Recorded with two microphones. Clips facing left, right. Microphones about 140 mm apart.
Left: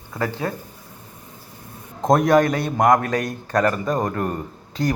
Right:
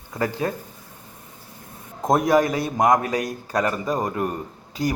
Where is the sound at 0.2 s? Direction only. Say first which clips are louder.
Right 1 dB; 15° right (ahead or behind).